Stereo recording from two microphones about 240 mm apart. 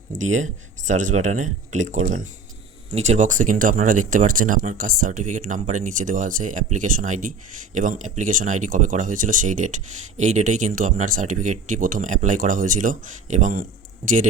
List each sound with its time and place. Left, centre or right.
0.1 s speech: right